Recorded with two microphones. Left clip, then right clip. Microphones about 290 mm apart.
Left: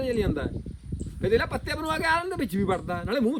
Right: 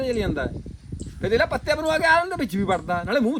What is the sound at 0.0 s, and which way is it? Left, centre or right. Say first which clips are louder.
Speech: right 3 dB; centre.